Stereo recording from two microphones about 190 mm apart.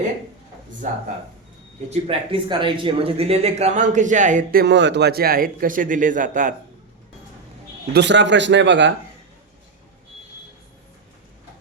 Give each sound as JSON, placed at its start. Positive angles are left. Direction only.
{"t": 0.8, "sound": "a man's voice", "side_deg": -40}
{"t": 1.9, "sound": "speech", "side_deg": -30}
{"t": 4.6, "sound": "a man's voice", "side_deg": -65}
{"t": 7.9, "sound": "speech", "side_deg": -70}